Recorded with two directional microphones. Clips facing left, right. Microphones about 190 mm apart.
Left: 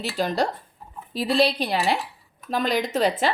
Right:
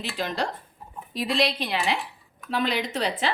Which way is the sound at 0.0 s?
40° left (ahead or behind).